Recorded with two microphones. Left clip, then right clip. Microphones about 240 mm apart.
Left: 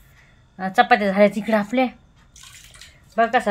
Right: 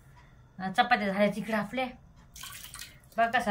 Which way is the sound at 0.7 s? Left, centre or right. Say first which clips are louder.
Left 10 dB; left.